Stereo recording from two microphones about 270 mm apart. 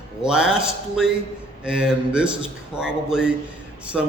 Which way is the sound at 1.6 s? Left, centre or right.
Centre.